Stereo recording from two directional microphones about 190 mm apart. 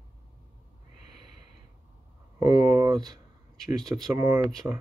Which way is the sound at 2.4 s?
20° right (ahead or behind).